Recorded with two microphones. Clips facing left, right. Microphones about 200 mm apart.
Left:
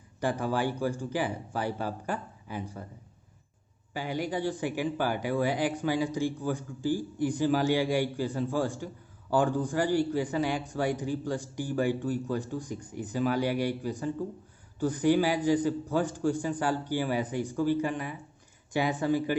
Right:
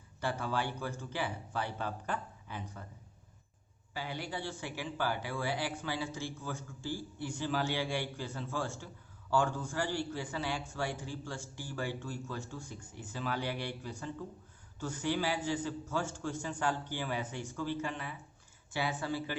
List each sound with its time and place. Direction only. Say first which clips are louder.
0.2 s speech: left 6 dB; 15° left (ahead or behind)
3.9 s speech: left 8 dB; 15° left (ahead or behind)